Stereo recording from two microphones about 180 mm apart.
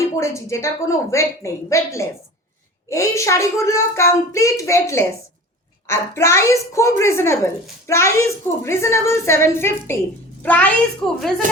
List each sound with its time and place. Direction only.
0.2 s a woman's voice: 15° left (ahead or behind)